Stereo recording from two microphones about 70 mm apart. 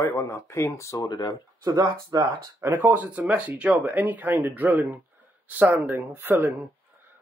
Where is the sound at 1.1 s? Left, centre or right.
Left.